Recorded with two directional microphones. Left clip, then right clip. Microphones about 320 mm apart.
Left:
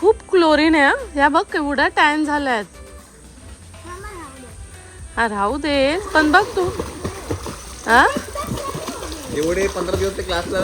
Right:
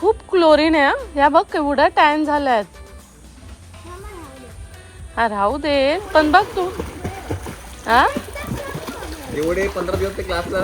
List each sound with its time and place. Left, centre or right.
0.0 s speech: centre
5.1 s speech: centre
7.9 s speech: centre
9.4 s speech: centre